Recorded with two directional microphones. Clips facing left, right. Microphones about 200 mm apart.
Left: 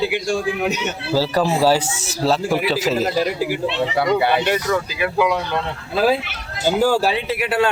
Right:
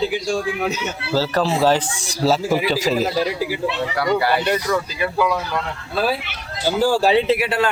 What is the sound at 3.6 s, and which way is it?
Speech, 20° left (ahead or behind).